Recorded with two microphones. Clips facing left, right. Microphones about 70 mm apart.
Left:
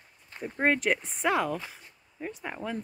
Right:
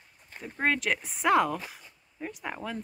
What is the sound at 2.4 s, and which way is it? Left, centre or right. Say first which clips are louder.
Speech: right 1 dB; centre.